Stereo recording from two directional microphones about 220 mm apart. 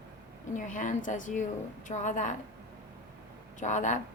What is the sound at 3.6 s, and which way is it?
Speech, 35° left (ahead or behind).